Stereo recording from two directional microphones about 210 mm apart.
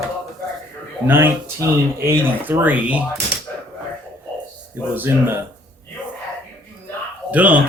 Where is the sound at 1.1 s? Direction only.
10° right (ahead or behind).